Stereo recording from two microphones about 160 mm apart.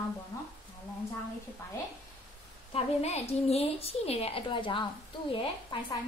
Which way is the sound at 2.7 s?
45° left (ahead or behind).